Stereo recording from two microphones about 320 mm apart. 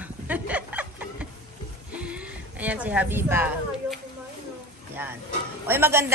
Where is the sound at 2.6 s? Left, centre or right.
Centre.